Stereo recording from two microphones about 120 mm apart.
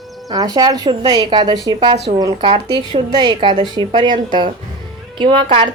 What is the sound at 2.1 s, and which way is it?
Speech, 55° right (ahead or behind).